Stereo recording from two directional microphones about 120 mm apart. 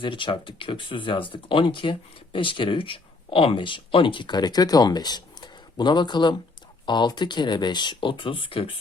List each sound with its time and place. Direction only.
0.0 s speech: 45° left (ahead or behind)